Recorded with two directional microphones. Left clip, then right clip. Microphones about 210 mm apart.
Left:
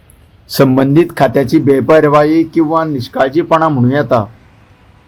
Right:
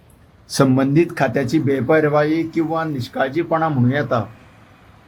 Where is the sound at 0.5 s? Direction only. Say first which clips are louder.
Left 6 dB; 15° left (ahead or behind).